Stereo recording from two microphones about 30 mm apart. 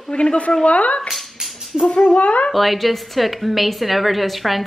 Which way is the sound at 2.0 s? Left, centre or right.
Left.